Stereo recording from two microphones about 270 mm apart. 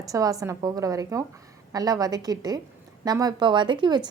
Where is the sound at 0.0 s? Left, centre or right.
Centre.